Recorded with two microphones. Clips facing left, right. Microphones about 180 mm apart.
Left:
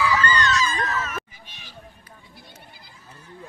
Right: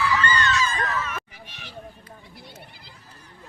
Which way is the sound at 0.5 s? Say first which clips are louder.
Left 1 dB; 40° left (ahead or behind).